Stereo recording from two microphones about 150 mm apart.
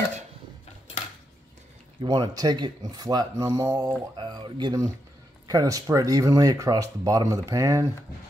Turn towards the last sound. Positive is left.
turn(degrees=-20)  # may be behind; listen again after turning